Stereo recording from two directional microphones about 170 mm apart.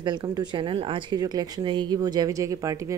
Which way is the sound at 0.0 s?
25° right (ahead or behind).